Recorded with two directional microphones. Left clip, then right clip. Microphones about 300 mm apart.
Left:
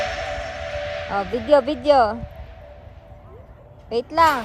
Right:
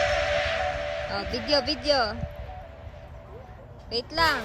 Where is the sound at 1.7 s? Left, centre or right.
Centre.